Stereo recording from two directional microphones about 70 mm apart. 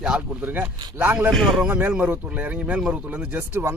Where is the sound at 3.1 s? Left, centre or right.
Right.